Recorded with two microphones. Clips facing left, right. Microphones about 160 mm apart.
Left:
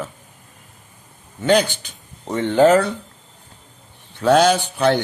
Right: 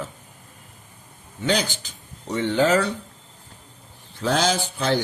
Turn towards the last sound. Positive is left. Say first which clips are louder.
# left 6 dB
turn(degrees=65)  # may be behind; listen again after turning